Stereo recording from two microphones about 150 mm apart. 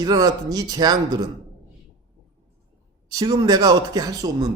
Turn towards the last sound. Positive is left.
turn(degrees=-25)  # may be behind; listen again after turning